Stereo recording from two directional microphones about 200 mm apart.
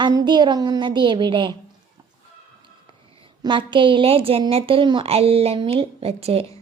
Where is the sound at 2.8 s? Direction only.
25° right (ahead or behind).